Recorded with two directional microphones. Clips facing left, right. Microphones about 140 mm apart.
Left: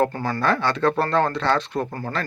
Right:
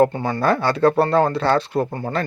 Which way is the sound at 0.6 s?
35° right (ahead or behind).